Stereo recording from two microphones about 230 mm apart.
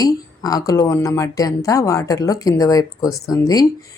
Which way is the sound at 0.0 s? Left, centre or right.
Centre.